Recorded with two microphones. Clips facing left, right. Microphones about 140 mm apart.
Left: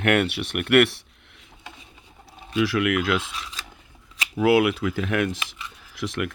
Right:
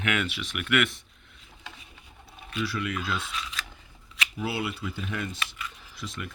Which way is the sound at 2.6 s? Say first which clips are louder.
Left 9 dB; 80° left.